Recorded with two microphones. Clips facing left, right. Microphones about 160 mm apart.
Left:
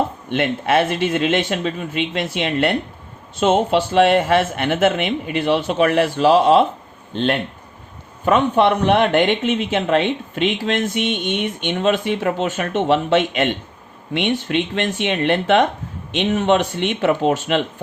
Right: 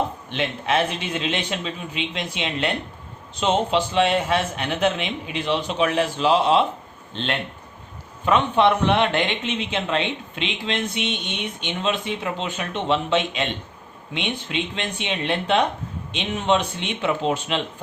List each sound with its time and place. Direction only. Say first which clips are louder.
0.3 s speech: left 5 dB; 60° left (ahead or behind)
6.2 s speech: left 5 dB; 40° left (ahead or behind); by 15.6 s 75° left (ahead or behind)
16.1 s speech: left 5 dB; 65° left (ahead or behind)
17.1 s speech: left 5 dB; 55° left (ahead or behind)